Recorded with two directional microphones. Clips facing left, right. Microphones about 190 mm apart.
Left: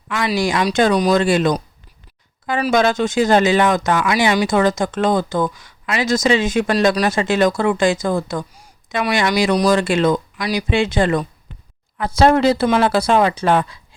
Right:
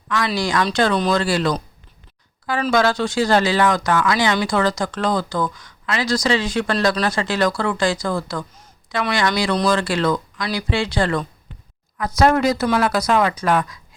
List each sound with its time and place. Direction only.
0.1 s a woman's voice: 20° left (ahead or behind)